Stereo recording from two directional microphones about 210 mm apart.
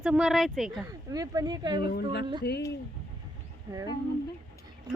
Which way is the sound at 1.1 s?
15° right (ahead or behind).